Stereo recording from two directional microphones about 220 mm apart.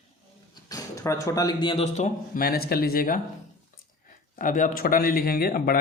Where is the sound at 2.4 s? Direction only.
45° left (ahead or behind).